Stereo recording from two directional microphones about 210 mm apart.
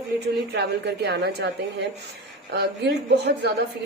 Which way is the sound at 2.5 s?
50° right (ahead or behind).